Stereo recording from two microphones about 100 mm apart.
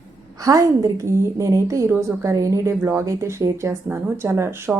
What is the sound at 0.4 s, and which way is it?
A woman's voice, 40° right (ahead or behind).